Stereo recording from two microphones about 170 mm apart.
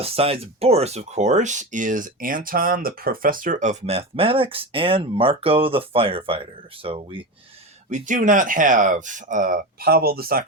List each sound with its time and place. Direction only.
0.0 s speech: 35° right (ahead or behind)
7.9 s speech: 50° right (ahead or behind)